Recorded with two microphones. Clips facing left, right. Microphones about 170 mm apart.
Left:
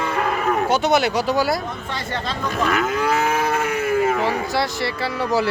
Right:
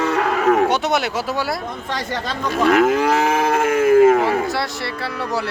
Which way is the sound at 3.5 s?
50° right (ahead or behind).